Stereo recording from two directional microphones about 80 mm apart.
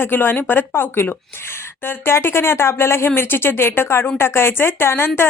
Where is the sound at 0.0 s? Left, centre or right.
Left.